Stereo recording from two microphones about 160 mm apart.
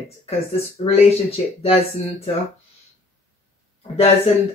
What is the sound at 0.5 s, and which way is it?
Speech, 40° left (ahead or behind).